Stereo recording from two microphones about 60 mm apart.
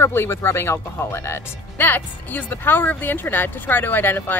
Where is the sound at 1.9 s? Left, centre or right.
Left.